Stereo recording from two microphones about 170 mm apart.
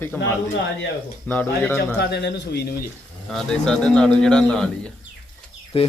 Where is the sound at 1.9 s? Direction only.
85° left.